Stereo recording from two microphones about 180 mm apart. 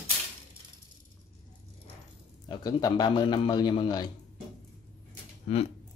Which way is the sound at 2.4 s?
25° left (ahead or behind).